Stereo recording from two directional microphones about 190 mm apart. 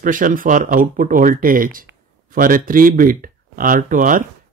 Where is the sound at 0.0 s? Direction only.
45° right (ahead or behind).